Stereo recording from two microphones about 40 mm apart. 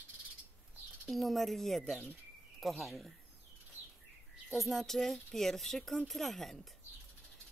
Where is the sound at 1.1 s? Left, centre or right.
Centre.